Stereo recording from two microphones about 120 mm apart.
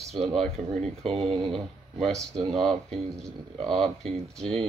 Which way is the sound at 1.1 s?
55° right (ahead or behind).